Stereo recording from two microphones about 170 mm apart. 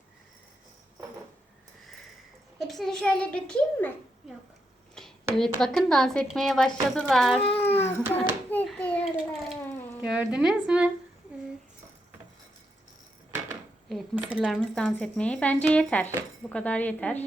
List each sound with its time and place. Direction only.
2.6 s a child's voice: centre (ahead or behind)
4.9 s a woman's voice: 5° left (ahead or behind)
8.1 s hands: 10° left (ahead or behind)
9.6 s a sound: 10° left (ahead or behind)
10.0 s speech: 5° right (ahead or behind)
13.9 s speech: 5° right (ahead or behind)